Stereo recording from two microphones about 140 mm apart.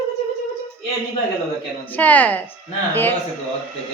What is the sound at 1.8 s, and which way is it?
Speech, 10° left (ahead or behind).